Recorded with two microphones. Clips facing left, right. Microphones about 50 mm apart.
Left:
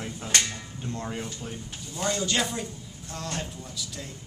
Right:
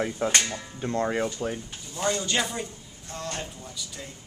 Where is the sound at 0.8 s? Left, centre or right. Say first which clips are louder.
Right 8 dB; right.